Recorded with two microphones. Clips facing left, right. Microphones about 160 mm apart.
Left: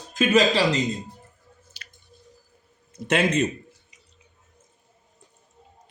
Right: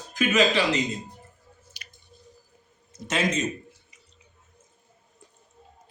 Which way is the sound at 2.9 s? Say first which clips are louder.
Left 4 dB; 60° left (ahead or behind).